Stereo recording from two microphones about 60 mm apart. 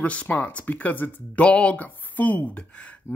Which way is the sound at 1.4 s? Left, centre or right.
Centre.